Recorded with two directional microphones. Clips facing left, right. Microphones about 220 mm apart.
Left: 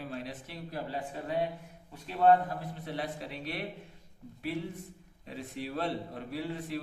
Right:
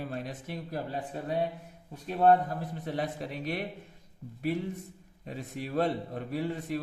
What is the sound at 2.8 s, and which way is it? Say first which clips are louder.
Speech: right 5 dB; 45° right (ahead or behind).